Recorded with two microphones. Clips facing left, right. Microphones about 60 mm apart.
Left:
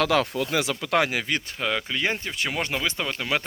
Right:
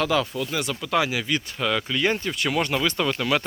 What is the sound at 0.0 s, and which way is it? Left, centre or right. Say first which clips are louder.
Speech: left 1 dB; left.